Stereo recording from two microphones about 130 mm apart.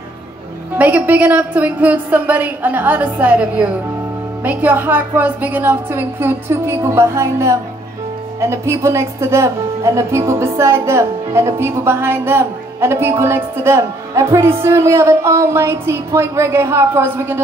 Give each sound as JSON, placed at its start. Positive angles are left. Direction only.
{"t": 0.7, "sound": "a woman's voice", "side_deg": -10}